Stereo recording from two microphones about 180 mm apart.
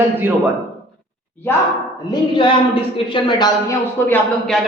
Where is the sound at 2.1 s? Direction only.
25° left (ahead or behind).